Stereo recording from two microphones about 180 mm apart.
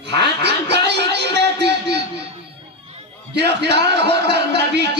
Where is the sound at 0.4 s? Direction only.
70° right (ahead or behind).